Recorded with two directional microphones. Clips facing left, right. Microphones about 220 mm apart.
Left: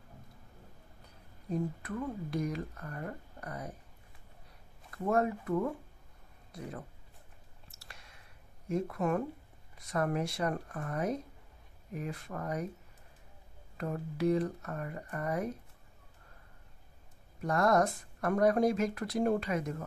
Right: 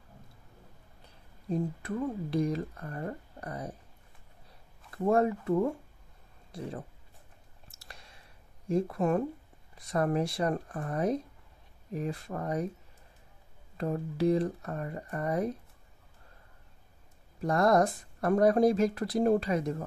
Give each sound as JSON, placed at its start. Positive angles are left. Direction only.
{"t": 1.5, "sound": "speech", "side_deg": -30}
{"t": 4.9, "sound": "speech", "side_deg": -30}
{"t": 7.7, "sound": "a sound", "side_deg": -35}
{"t": 8.6, "sound": "speech", "side_deg": -30}
{"t": 13.7, "sound": "speech", "side_deg": -30}
{"t": 17.4, "sound": "speech", "side_deg": -35}